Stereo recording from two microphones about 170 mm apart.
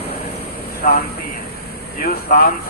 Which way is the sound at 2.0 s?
60° left (ahead or behind).